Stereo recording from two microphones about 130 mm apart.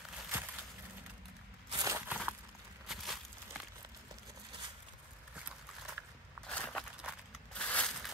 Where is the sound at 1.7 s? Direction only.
25° right (ahead or behind).